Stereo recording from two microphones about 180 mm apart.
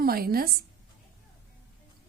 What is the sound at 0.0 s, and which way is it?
Speech, 55° right (ahead or behind).